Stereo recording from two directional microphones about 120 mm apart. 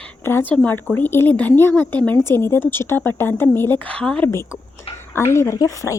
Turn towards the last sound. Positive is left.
turn(degrees=25)  # may be behind; listen again after turning